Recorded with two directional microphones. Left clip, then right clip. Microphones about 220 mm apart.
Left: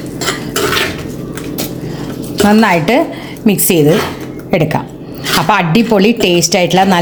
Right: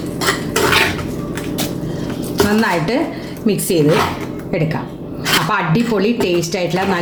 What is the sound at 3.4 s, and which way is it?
A woman's voice, 35° left (ahead or behind).